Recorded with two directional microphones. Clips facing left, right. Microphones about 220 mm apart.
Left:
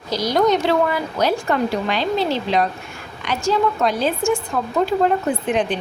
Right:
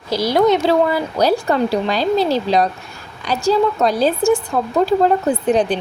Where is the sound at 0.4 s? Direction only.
35° right (ahead or behind).